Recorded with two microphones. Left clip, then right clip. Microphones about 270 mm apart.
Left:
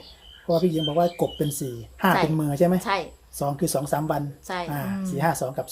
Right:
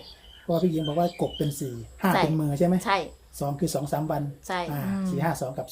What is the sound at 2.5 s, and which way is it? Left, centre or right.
Speech, left.